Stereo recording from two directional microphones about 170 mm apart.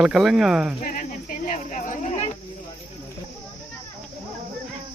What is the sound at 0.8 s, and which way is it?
Cricket, 50° left (ahead or behind).